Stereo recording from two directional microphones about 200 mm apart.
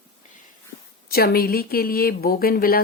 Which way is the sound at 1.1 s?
50° left (ahead or behind).